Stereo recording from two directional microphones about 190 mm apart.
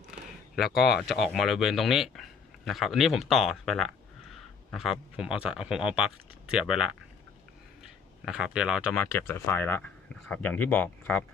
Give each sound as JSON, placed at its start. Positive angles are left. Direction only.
{"t": 0.5, "sound": "speech", "side_deg": 0}
{"t": 0.8, "sound": "speech", "side_deg": 55}
{"t": 1.0, "sound": "speech", "side_deg": 0}
{"t": 8.2, "sound": "speech", "side_deg": -5}
{"t": 9.0, "sound": "speech", "side_deg": 10}